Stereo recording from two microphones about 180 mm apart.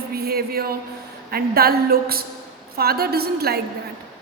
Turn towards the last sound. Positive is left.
turn(degrees=-60)  # may be behind; listen again after turning